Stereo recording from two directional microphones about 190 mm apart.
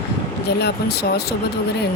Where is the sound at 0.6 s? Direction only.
60° left (ahead or behind).